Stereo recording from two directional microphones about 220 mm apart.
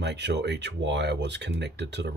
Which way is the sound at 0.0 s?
50° right (ahead or behind).